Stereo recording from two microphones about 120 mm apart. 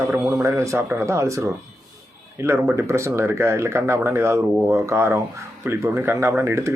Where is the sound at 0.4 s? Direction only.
25° right (ahead or behind).